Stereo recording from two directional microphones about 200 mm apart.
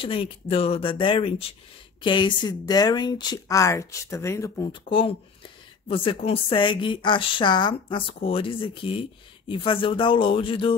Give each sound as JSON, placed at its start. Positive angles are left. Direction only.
{"t": 0.0, "sound": "a woman's voice", "side_deg": 25}
{"t": 4.8, "sound": "a woman's voice", "side_deg": 25}